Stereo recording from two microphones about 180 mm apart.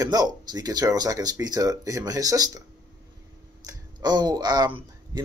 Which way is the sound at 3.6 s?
25° right (ahead or behind).